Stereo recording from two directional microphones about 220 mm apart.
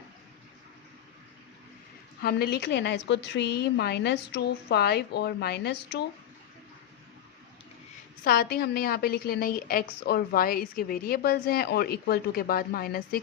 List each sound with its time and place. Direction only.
2.2 s a woman's voice: 45° left (ahead or behind)
8.2 s a woman's voice: 45° left (ahead or behind)